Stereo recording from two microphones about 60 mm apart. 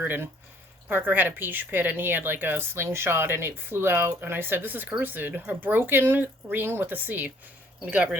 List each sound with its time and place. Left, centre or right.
0.0 s a woman's voice: right